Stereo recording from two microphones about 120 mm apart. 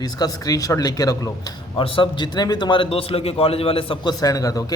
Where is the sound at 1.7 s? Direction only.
45° left (ahead or behind).